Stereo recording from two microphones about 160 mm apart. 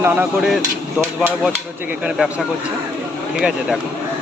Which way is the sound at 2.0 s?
5° right (ahead or behind).